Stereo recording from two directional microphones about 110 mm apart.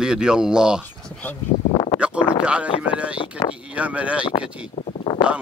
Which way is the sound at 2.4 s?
10° right (ahead or behind).